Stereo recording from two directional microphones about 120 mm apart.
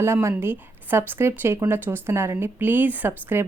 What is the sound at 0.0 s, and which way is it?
Speech, 20° right (ahead or behind).